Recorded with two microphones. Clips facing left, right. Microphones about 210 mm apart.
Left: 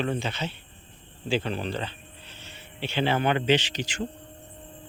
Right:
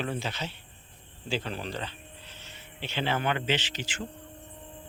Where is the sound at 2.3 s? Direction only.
30° left (ahead or behind).